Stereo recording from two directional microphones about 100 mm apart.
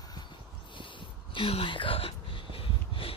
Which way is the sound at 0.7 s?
55° left (ahead or behind).